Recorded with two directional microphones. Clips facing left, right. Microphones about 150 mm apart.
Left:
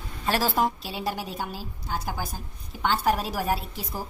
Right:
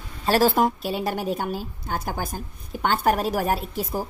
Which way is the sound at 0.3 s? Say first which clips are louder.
Right 5 dB; 50° right (ahead or behind).